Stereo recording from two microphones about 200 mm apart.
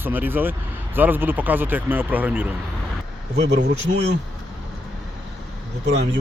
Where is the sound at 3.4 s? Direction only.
55° right (ahead or behind).